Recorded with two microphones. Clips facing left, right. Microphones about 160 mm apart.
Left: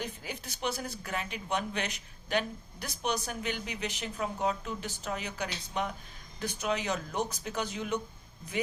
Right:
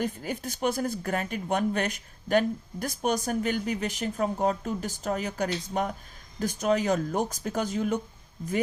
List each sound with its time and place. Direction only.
0.0 s speech: 45° right (ahead or behind)